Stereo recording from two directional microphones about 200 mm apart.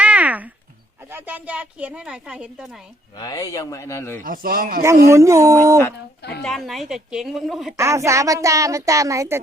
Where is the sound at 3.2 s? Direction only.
15° left (ahead or behind).